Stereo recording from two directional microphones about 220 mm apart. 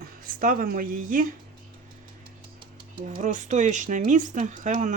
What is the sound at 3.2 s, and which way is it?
Speech, 35° right (ahead or behind).